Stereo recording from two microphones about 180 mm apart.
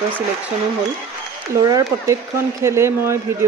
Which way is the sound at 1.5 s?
20° right (ahead or behind).